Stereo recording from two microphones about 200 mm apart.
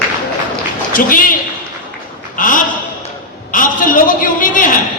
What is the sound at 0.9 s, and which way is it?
Speech, 45° left (ahead or behind).